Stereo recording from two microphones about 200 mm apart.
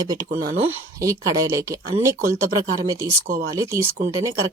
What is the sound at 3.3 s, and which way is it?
Speech, 35° right (ahead or behind).